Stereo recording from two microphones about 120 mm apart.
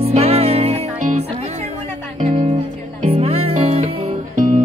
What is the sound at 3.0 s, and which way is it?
Music, 60° right (ahead or behind).